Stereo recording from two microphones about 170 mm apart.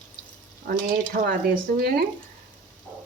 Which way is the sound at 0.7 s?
65° right (ahead or behind).